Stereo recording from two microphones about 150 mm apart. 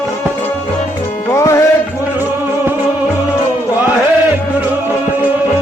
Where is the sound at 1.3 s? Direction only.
20° left (ahead or behind).